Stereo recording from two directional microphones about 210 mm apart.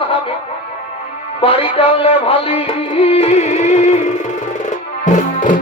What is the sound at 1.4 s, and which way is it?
Music, 30° left (ahead or behind).